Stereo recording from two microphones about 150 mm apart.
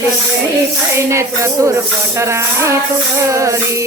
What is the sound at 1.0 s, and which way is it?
Music, 20° right (ahead or behind).